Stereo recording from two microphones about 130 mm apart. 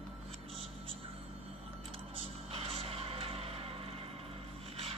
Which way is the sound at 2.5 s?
45° right (ahead or behind).